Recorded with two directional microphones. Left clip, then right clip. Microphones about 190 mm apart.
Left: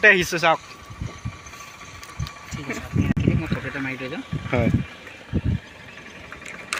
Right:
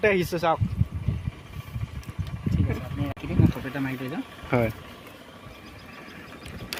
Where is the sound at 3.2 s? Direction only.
50° right (ahead or behind).